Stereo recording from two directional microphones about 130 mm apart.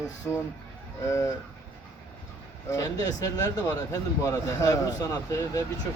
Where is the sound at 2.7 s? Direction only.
25° left (ahead or behind).